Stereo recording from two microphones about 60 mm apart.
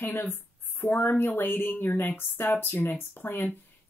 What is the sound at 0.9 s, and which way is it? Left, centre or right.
Speech, left.